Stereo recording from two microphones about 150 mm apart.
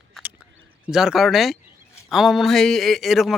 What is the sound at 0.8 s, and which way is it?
Speech, 5° right (ahead or behind).